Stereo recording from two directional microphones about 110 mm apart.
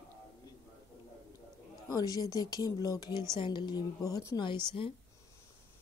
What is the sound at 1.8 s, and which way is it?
Speech, 35° left (ahead or behind).